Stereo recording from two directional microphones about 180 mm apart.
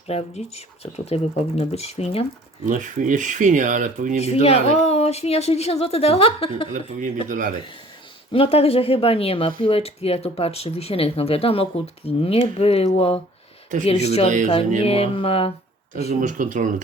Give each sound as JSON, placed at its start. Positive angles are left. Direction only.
{"t": 0.1, "sound": "speech", "side_deg": 35}
{"t": 2.6, "sound": "speech", "side_deg": -45}
{"t": 4.2, "sound": "speech", "side_deg": 35}
{"t": 6.7, "sound": "speech", "side_deg": -45}
{"t": 8.3, "sound": "speech", "side_deg": 30}
{"t": 16.2, "sound": "speech", "side_deg": -45}